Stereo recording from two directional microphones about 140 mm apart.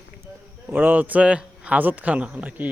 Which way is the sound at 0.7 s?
10° right (ahead or behind).